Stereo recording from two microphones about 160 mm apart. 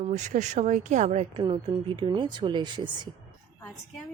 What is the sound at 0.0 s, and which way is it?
Speech, 50° right (ahead or behind).